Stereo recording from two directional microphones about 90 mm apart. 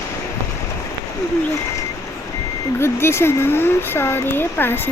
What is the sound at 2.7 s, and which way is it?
Speech, 30° left (ahead or behind).